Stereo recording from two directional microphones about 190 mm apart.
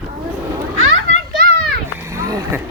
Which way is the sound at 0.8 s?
90° right.